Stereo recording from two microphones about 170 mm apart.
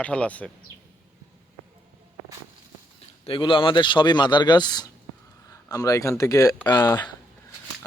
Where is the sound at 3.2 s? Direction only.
30° left (ahead or behind).